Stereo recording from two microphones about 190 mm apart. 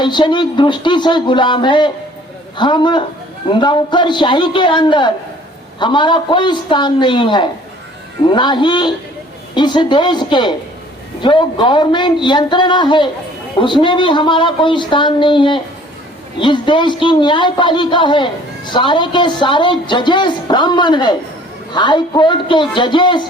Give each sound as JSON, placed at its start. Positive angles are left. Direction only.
{"t": 0.0, "sound": "a man's voice", "side_deg": 25}